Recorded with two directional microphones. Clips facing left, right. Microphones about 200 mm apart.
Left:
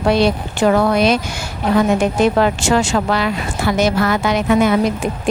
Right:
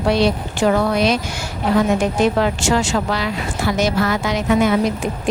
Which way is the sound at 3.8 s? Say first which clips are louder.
Left 3 dB; 60° left (ahead or behind).